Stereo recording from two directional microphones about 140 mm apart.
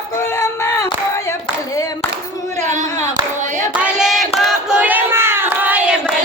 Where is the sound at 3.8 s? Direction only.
5° right (ahead or behind).